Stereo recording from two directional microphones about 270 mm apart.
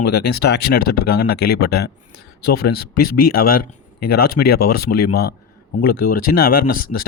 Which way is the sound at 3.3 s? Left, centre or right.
Left.